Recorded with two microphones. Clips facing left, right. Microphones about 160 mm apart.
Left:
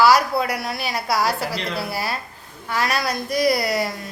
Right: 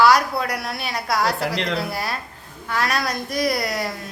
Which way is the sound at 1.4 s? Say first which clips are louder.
Right 3 dB; 75° right (ahead or behind).